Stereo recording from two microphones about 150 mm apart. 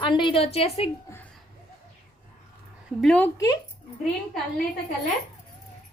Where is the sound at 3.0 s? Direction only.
5° left (ahead or behind).